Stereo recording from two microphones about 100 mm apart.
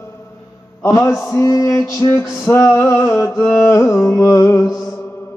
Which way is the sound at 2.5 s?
30° left (ahead or behind).